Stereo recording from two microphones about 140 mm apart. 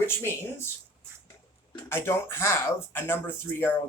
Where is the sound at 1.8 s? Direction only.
15° left (ahead or behind).